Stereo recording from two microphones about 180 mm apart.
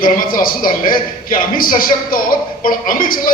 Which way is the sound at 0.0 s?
50° left (ahead or behind).